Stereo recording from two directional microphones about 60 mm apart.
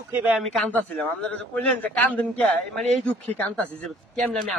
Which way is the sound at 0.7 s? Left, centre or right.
Left.